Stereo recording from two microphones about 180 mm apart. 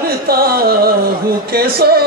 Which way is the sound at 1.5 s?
55° right (ahead or behind).